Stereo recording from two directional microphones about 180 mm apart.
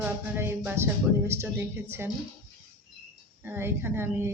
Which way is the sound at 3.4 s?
10° right (ahead or behind).